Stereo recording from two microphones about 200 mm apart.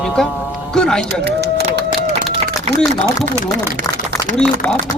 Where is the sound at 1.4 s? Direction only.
55° right (ahead or behind).